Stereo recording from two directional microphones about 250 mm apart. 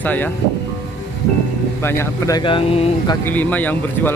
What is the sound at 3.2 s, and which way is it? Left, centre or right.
Speech, centre.